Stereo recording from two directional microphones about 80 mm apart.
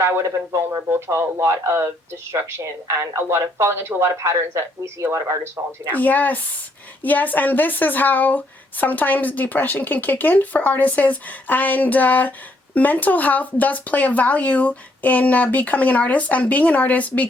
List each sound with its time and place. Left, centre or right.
0.0 s speech: right
5.9 s a woman's voice: left